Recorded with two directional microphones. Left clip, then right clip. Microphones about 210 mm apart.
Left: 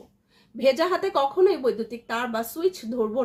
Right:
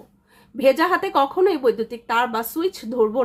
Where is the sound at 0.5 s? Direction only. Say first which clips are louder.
Right 4 dB; 35° right (ahead or behind).